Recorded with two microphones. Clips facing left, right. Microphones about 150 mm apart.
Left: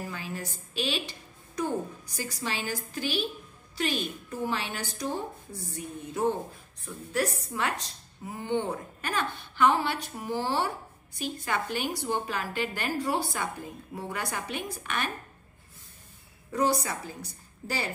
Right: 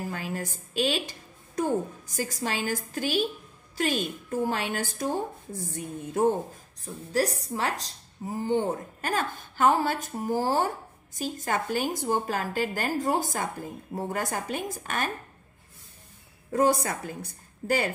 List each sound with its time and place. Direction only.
0.1 s a woman's voice: 50° right (ahead or behind)
7.1 s a woman's voice: 35° right (ahead or behind)
16.5 s a woman's voice: 50° right (ahead or behind)